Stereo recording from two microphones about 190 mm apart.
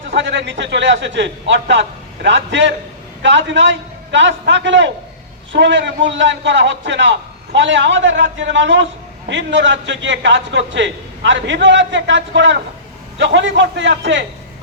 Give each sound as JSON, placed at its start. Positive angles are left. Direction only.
{"t": 0.1, "sound": "a man's voice", "side_deg": -70}